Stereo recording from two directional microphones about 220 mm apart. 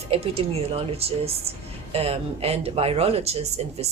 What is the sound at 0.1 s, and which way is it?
Speech, 25° right (ahead or behind).